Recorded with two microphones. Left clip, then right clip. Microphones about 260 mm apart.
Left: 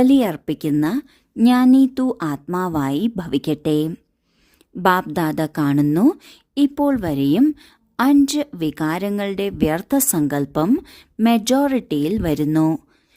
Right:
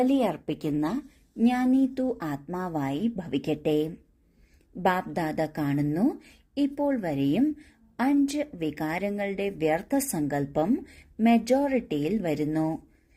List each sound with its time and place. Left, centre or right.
0.0 s a woman's voice: left